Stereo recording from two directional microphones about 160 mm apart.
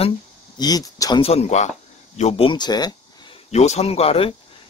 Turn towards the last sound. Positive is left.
turn(degrees=35)  # may be behind; listen again after turning